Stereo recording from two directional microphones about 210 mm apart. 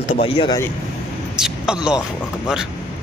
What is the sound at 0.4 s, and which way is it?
Speech, 20° left (ahead or behind).